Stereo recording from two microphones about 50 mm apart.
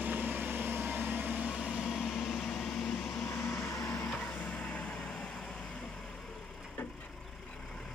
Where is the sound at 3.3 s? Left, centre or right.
Left.